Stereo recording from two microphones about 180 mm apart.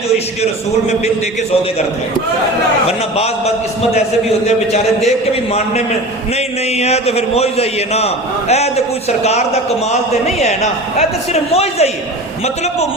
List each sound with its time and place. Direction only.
2.8 s a man's voice: 35° left (ahead or behind)